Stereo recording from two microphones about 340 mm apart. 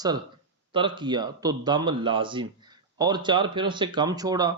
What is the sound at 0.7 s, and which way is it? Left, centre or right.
Speech, centre.